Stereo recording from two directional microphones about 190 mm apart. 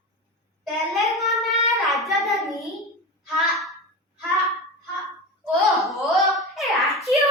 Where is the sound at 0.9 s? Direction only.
Centre (ahead or behind).